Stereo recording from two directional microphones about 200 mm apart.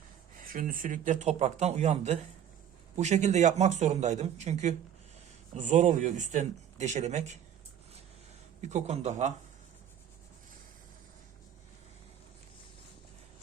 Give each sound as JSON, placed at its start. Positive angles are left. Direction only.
{"t": 0.3, "sound": "speech", "side_deg": -45}
{"t": 8.6, "sound": "speech", "side_deg": -35}